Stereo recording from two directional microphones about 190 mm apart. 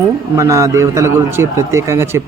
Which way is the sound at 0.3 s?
15° right (ahead or behind).